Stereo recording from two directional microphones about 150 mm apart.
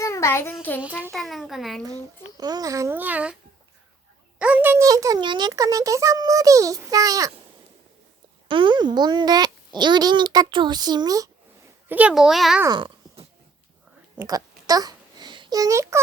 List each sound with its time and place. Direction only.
0.0 s child singing: 20° left (ahead or behind)
1.1 s a child's voice: centre (ahead or behind)
2.4 s a child's voice: 25° right (ahead or behind); by 3.3 s 10° right (ahead or behind)
4.4 s a child's voice: 10° right (ahead or behind)
8.4 s a child's voice: 35° right (ahead or behind)
11.9 s a child's voice: 10° right (ahead or behind)
12.6 s a sound: 30° right (ahead or behind)
14.2 s babbling: 25° right (ahead or behind)